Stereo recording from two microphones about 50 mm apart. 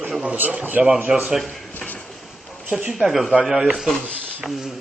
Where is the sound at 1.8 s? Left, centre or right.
Left.